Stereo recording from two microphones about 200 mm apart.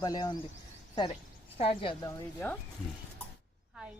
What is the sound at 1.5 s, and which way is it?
Speech, 30° left (ahead or behind).